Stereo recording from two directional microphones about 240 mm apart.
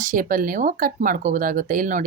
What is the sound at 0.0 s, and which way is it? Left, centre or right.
Speech, right.